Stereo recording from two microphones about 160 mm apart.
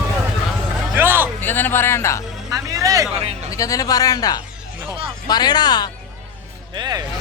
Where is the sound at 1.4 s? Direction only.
10° left (ahead or behind).